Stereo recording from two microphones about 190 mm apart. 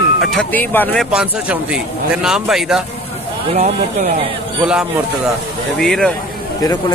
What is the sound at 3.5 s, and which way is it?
Speech, 40° right (ahead or behind).